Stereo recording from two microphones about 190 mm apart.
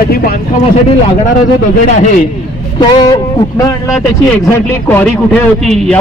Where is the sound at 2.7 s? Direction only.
25° left (ahead or behind).